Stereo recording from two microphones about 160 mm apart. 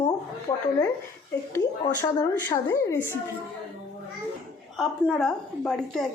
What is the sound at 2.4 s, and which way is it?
Speech, 15° left (ahead or behind).